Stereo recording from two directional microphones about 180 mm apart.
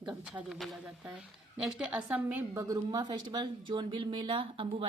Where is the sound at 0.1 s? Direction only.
5° right (ahead or behind).